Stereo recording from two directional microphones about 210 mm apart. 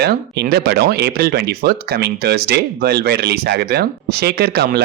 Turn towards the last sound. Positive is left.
turn(degrees=-50)  # may be behind; listen again after turning